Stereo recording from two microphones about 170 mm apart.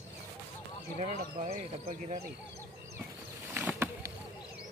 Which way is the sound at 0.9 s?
40° right (ahead or behind).